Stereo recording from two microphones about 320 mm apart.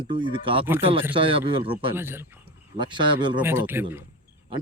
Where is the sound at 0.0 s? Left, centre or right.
Centre.